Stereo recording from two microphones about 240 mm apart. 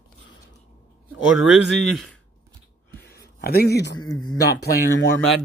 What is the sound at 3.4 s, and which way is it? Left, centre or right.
Speech, left.